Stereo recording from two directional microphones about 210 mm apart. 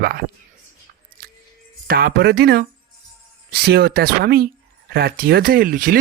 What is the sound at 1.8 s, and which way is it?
Speech, 50° right (ahead or behind).